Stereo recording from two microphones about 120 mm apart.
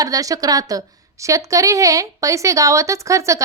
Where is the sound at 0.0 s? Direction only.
30° right (ahead or behind).